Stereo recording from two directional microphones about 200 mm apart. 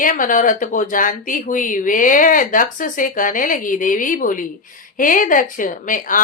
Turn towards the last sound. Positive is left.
turn(degrees=40)  # may be behind; listen again after turning